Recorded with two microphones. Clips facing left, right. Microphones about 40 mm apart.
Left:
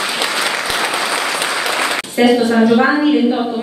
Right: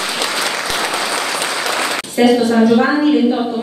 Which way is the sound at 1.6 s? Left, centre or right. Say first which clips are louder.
Left 1 dB; centre.